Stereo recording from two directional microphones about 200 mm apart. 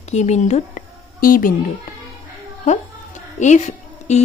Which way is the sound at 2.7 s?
35° left (ahead or behind).